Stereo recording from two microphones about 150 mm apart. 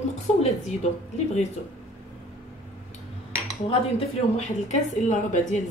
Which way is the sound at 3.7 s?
45° left (ahead or behind).